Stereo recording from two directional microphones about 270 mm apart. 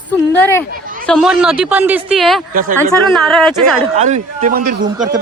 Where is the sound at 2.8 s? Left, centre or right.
Centre.